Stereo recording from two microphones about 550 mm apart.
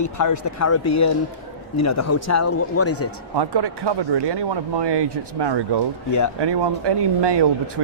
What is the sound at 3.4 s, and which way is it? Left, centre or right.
Speech, right.